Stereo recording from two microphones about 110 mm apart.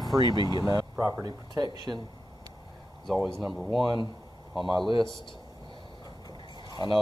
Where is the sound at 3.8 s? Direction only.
45° right (ahead or behind).